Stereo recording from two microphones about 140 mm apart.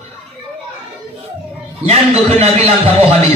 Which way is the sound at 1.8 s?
50° right (ahead or behind).